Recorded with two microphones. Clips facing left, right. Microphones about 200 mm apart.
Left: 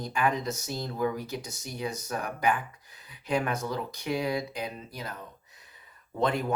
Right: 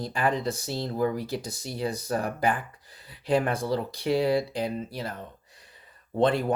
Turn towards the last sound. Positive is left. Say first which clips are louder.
# right 5 dB
turn(degrees=-30)  # may be behind; listen again after turning